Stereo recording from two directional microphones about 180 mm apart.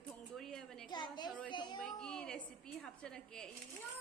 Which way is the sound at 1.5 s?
25° left (ahead or behind).